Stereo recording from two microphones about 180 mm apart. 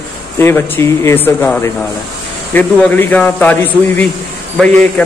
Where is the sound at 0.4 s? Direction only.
15° left (ahead or behind).